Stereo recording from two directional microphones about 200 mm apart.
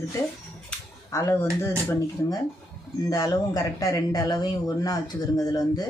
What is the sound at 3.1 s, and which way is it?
Speech, 20° left (ahead or behind).